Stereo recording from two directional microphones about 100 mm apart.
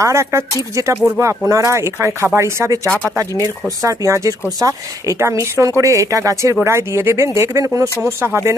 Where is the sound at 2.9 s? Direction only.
15° left (ahead or behind).